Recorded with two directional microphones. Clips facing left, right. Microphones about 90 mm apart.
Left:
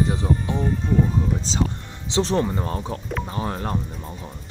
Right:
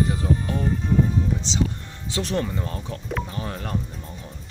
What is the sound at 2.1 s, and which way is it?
Speech, 30° left (ahead or behind).